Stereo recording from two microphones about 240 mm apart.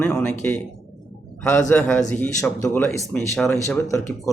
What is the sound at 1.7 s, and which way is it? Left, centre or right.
Speech, centre.